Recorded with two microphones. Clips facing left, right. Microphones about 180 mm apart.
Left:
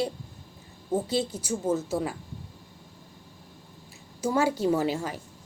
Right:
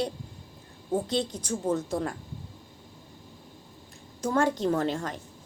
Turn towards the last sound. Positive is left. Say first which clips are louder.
# left 1 dB
turn(degrees=5)  # may be behind; listen again after turning